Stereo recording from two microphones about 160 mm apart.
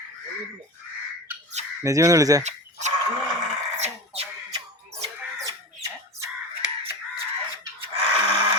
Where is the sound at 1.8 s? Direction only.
20° right (ahead or behind).